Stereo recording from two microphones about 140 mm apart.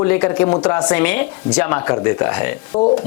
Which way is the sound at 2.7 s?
35° left (ahead or behind).